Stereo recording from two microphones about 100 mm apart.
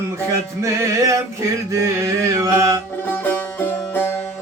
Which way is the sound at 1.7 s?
30° right (ahead or behind).